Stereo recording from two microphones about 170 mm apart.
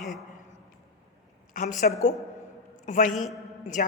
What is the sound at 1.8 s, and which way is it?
A woman's voice, 50° left (ahead or behind).